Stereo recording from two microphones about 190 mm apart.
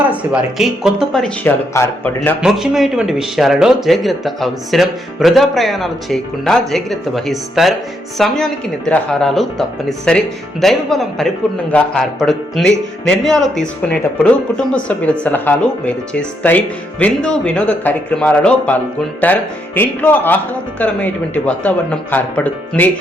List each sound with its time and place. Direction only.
0.6 s speech: centre (ahead or behind)
1.7 s speech: 10° left (ahead or behind)
2.4 s speech: centre (ahead or behind)